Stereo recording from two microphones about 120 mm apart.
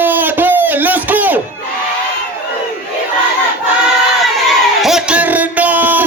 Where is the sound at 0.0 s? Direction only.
15° right (ahead or behind).